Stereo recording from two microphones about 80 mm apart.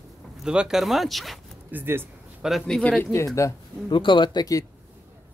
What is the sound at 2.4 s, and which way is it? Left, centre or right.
Speech, centre.